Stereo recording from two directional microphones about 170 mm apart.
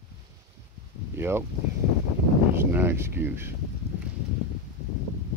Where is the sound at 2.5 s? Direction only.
15° right (ahead or behind).